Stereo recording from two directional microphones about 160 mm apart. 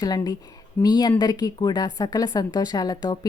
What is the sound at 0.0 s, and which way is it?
Speech, 25° left (ahead or behind).